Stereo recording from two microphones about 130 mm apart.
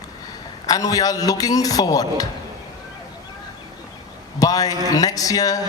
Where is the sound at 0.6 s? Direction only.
30° left (ahead or behind).